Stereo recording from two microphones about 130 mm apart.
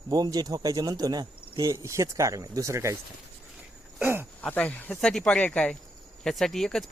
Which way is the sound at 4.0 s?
15° right (ahead or behind).